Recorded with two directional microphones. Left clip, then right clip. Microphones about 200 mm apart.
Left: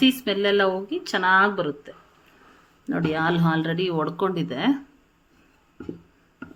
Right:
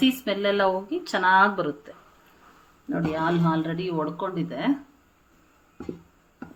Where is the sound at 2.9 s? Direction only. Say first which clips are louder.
Left 2 dB; 55° left (ahead or behind).